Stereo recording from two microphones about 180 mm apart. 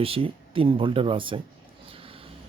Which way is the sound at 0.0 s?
30° right (ahead or behind).